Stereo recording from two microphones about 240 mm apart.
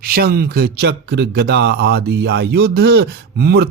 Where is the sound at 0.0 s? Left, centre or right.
Right.